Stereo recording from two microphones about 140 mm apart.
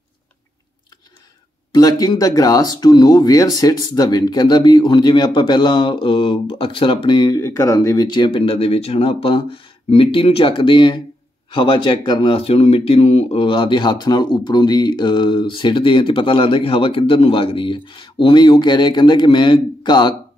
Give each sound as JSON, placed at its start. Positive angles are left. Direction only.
{"t": 1.7, "sound": "speech", "side_deg": 30}